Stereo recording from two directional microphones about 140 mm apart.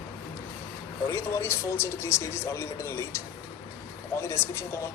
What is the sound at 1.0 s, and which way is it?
Speech, 20° left (ahead or behind).